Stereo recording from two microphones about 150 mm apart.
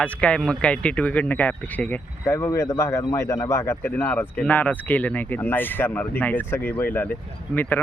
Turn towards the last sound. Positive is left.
turn(degrees=10)  # may be behind; listen again after turning